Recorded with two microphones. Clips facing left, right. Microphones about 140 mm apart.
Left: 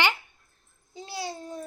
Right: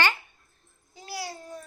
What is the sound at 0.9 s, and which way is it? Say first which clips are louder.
Babbling: left 2 dB; 20° left (ahead or behind).